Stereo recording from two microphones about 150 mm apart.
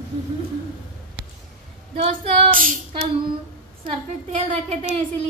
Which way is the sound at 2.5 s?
65° right (ahead or behind).